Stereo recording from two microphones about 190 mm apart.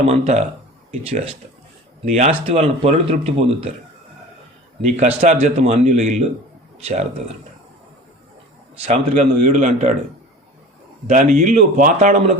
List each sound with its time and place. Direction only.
0.1 s speech: 35° right (ahead or behind)
4.8 s speech: 35° right (ahead or behind)
8.8 s speech: 35° right (ahead or behind)
11.1 s speech: 45° right (ahead or behind)